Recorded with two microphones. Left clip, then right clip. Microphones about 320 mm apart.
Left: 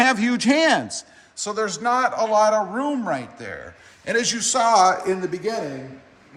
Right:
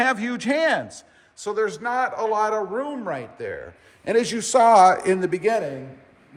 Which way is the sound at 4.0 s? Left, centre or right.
Centre.